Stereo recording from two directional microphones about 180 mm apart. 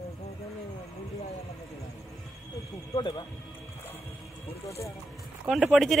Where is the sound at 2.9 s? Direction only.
25° left (ahead or behind).